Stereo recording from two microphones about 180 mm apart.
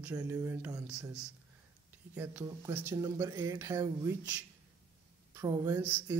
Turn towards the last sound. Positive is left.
turn(degrees=-10)  # may be behind; listen again after turning